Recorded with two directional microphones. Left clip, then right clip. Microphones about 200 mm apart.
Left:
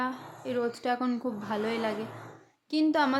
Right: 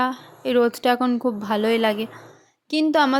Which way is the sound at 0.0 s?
45° right (ahead or behind).